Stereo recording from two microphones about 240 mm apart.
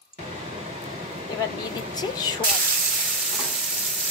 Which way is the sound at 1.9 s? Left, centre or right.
Centre.